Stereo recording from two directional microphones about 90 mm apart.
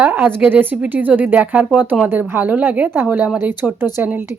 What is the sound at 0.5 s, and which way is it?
Speech, 20° right (ahead or behind).